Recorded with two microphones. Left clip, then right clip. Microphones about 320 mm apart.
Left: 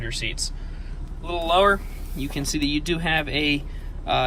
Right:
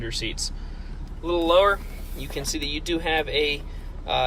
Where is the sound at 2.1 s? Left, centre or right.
Centre.